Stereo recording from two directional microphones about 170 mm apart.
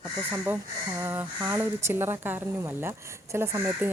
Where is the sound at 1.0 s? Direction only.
10° right (ahead or behind).